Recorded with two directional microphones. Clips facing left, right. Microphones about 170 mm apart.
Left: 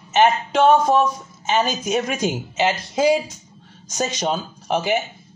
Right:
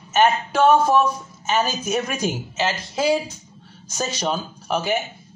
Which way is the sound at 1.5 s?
25° left (ahead or behind).